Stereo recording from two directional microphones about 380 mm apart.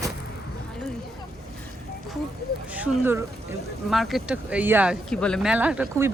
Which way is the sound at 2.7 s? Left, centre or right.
Centre.